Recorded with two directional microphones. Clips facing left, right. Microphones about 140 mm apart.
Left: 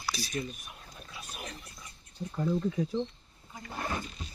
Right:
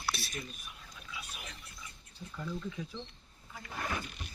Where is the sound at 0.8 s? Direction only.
40° left (ahead or behind).